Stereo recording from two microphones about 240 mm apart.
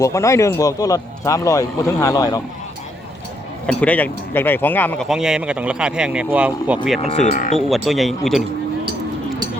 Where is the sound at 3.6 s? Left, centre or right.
Centre.